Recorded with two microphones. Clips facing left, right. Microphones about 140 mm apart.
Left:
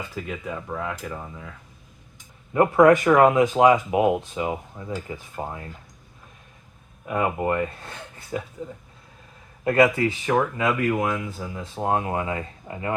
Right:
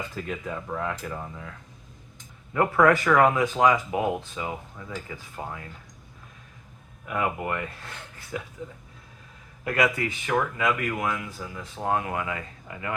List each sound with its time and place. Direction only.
0.1 s speech: 10° left (ahead or behind)
2.5 s speech: 20° left (ahead or behind)
7.0 s speech: 30° left (ahead or behind)
9.6 s speech: 25° left (ahead or behind)